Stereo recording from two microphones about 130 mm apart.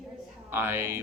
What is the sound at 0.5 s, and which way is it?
Speech, 15° right (ahead or behind).